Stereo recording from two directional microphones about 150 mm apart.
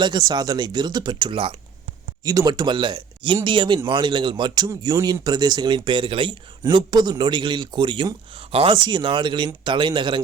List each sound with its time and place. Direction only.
0.0 s speech: 25° right (ahead or behind)
2.2 s speech: 25° right (ahead or behind)